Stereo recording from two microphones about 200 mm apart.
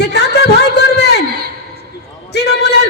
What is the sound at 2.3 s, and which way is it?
Speech, 55° left (ahead or behind).